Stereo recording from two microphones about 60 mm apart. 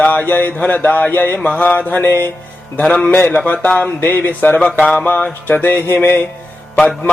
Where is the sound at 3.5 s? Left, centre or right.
Left.